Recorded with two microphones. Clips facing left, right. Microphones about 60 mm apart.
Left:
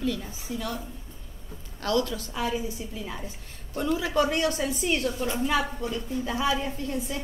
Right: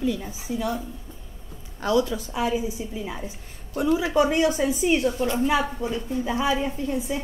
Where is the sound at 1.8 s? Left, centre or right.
Centre.